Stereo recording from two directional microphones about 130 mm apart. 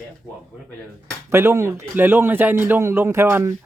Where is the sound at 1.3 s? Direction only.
20° right (ahead or behind).